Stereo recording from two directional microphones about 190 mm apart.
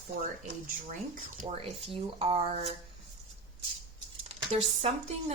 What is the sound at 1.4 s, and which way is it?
Speech, 30° right (ahead or behind).